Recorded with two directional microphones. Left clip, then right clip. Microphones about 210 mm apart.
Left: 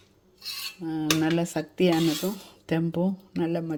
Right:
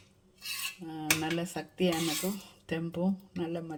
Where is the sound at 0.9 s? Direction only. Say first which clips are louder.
Left 7 dB; 35° left (ahead or behind).